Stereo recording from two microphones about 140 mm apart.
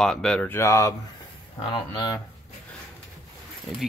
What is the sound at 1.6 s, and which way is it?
Speech, 35° left (ahead or behind).